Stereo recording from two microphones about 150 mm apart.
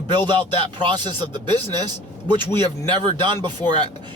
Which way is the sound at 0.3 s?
30° right (ahead or behind).